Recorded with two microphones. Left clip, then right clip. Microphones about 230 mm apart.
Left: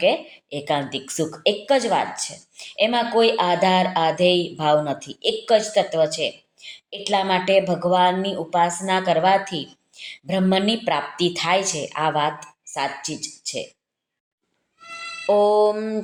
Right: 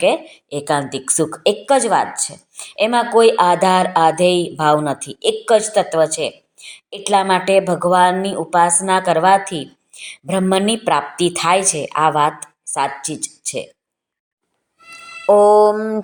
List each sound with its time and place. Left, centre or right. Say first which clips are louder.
0.0 s a woman's voice: right 4 dB; right
15.3 s a woman's voice: right 7 dB; right